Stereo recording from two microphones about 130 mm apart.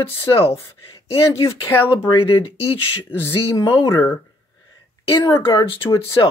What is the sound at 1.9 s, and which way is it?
Speech, 40° left (ahead or behind).